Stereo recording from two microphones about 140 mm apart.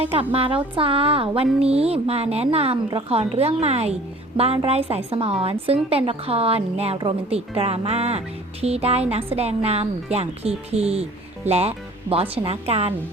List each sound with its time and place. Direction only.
0.0 s a woman's voice: 40° right (ahead or behind)